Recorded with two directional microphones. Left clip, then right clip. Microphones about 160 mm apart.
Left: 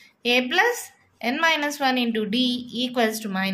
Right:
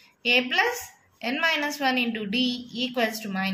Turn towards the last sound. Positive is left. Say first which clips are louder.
# left 3 dB
turn(degrees=45)  # may be behind; listen again after turning